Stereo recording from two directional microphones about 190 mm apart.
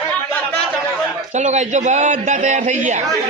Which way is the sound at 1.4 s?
40° right (ahead or behind).